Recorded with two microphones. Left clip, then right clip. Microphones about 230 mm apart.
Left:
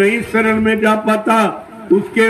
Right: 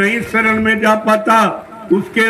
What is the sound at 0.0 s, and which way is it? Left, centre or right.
Speech, right.